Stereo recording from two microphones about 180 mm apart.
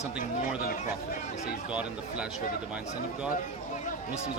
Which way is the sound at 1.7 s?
5° right (ahead or behind).